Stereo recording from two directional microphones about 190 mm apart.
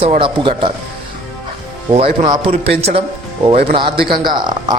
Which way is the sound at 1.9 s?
25° right (ahead or behind).